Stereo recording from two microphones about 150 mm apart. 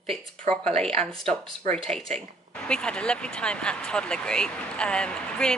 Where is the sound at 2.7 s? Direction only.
5° left (ahead or behind).